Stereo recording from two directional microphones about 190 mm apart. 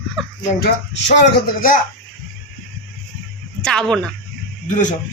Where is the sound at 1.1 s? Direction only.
50° left (ahead or behind).